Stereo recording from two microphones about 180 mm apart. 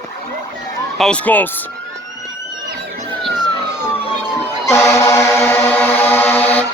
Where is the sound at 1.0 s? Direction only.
5° left (ahead or behind).